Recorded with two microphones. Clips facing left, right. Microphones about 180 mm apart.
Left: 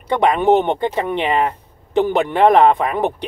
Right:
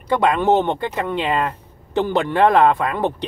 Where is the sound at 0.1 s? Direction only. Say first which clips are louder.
Left 2 dB; 15° left (ahead or behind).